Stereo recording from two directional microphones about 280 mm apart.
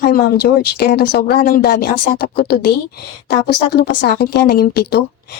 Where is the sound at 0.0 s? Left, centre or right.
Left.